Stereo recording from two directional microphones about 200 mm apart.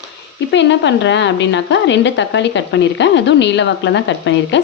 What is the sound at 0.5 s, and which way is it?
A woman's voice, 65° left (ahead or behind).